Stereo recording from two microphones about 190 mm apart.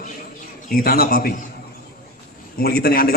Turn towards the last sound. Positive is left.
turn(degrees=55)  # may be behind; listen again after turning